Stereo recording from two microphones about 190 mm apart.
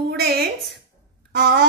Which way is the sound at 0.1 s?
60° right (ahead or behind).